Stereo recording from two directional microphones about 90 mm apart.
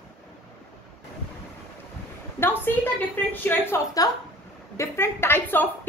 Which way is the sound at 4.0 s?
40° left (ahead or behind).